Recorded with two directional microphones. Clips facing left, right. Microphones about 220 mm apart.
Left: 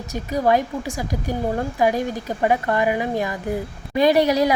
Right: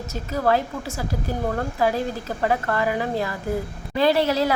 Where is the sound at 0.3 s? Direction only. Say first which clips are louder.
Left 2 dB; 15° left (ahead or behind).